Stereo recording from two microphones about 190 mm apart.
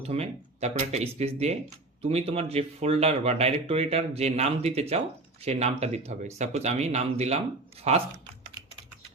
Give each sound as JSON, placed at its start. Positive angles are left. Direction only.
{"t": 0.0, "sound": "speech", "side_deg": -35}